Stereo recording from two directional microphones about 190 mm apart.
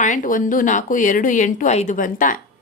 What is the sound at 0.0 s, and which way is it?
A woman's voice, 45° left (ahead or behind).